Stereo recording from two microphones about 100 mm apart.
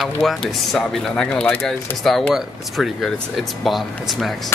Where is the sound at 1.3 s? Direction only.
20° left (ahead or behind).